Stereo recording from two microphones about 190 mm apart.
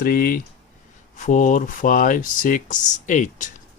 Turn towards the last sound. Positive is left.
turn(degrees=40)  # may be behind; listen again after turning